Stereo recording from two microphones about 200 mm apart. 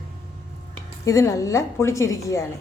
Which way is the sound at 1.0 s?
15° left (ahead or behind).